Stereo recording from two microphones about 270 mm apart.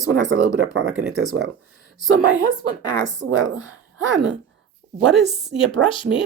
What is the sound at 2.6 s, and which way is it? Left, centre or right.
Speech, right.